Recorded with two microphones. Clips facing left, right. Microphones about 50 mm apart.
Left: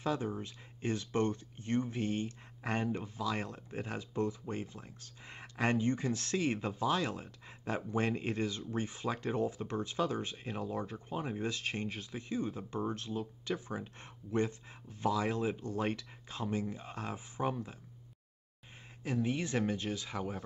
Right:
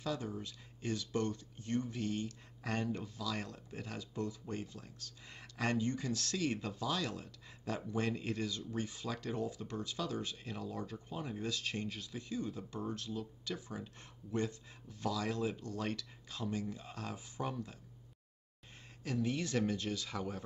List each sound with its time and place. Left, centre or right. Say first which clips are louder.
0.0 s speech: left 4 dB; left
19.0 s speech: left 2 dB; left